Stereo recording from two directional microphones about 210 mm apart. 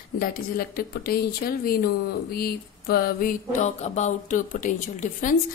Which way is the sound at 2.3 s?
45° left (ahead or behind).